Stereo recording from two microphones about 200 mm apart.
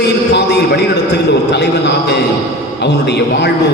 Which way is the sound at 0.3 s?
55° left (ahead or behind).